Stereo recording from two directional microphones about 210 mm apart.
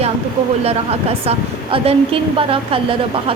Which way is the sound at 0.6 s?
30° right (ahead or behind).